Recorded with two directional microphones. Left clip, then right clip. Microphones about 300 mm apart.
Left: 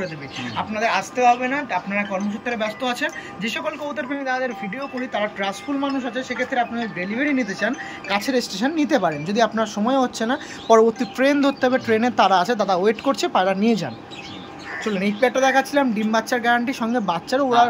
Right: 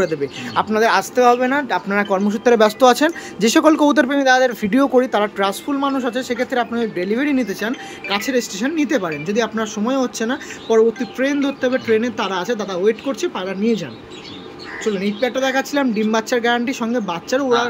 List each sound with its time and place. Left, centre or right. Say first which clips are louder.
0.6 s speech: right 6 dB; centre
15.0 s speech: left 3 dB; centre